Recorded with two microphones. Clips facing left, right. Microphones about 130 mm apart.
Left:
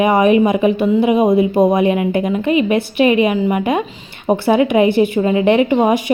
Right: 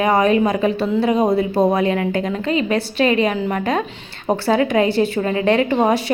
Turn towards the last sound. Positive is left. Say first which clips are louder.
# left 3 dB
turn(degrees=10)  # may be behind; listen again after turning